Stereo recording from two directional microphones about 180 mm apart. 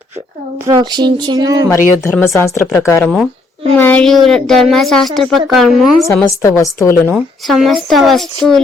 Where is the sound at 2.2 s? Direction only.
15° left (ahead or behind); by 5.9 s centre (ahead or behind).